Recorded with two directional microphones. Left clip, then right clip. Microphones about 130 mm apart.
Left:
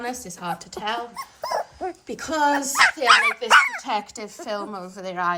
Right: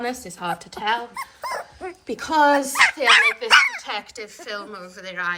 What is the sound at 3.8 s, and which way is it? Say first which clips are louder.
A woman's voice: left 3 dB; 55° left (ahead or behind).